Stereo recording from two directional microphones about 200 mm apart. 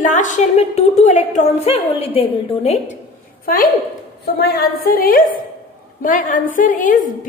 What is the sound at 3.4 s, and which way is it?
A woman's voice, 45° left (ahead or behind).